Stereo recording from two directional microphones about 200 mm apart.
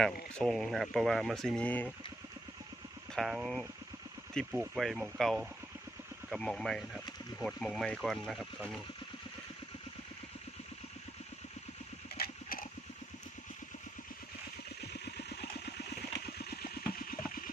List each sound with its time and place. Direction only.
0.3 s speech: centre (ahead or behind)
3.1 s speech: centre (ahead or behind)
12.1 s a sound: 45° left (ahead or behind)
14.8 s vehicle: 55° left (ahead or behind)